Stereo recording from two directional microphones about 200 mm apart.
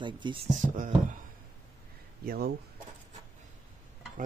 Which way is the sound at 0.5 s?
40° right (ahead or behind).